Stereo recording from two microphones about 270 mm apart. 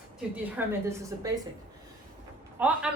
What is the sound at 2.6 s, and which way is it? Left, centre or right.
Speech, centre.